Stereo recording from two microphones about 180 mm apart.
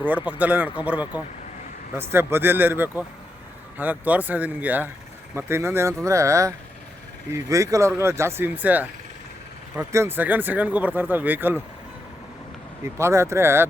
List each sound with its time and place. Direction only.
0.0 s speech: 10° right (ahead or behind)
12.8 s speech: 15° right (ahead or behind)